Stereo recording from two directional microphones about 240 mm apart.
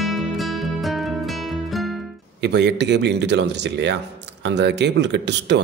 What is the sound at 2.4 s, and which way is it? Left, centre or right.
A man's voice, right.